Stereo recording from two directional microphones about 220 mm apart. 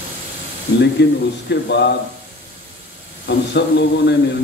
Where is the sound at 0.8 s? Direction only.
50° left (ahead or behind).